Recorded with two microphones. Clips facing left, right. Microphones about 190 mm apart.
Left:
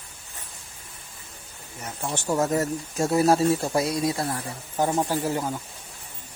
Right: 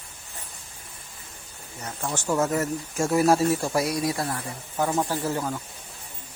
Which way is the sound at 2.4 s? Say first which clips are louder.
Left 2 dB; 35° left (ahead or behind).